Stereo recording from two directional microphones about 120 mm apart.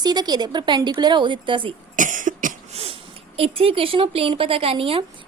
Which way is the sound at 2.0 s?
90° right.